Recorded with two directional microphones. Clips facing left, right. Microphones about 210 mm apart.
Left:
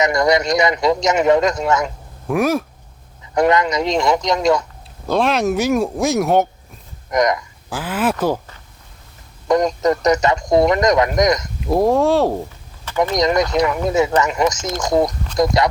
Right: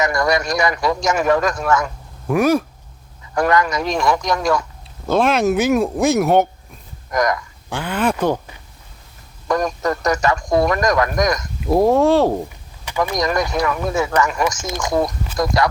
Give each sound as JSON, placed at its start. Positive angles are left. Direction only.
{"t": 0.0, "sound": "a man's voice", "side_deg": 20}
{"t": 2.2, "sound": "speech", "side_deg": 0}
{"t": 3.3, "sound": "a man's voice", "side_deg": 20}
{"t": 5.0, "sound": "speech", "side_deg": 0}
{"t": 7.1, "sound": "a man's voice", "side_deg": 20}
{"t": 7.7, "sound": "speech", "side_deg": 5}
{"t": 9.5, "sound": "a man's voice", "side_deg": 20}
{"t": 11.6, "sound": "speech", "side_deg": 0}
{"t": 13.1, "sound": "a man's voice", "side_deg": 20}